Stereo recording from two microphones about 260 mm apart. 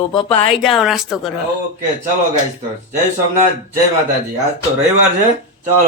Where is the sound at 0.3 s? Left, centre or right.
Centre.